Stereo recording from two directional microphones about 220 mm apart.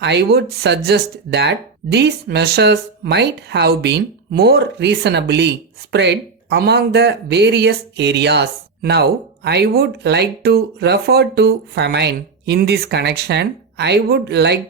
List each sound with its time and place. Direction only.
0.0 s speech: 50° right (ahead or behind)